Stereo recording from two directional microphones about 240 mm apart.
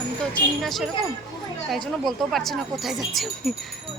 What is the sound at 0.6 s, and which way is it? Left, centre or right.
Speech, centre.